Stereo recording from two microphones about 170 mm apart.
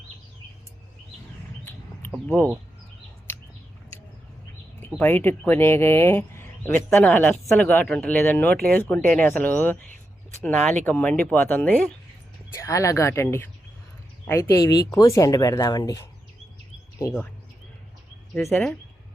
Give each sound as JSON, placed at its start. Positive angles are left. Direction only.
{"t": 2.1, "sound": "speech", "side_deg": 10}
{"t": 4.9, "sound": "speech", "side_deg": 10}
{"t": 17.0, "sound": "speech", "side_deg": 15}
{"t": 18.5, "sound": "speech", "side_deg": 5}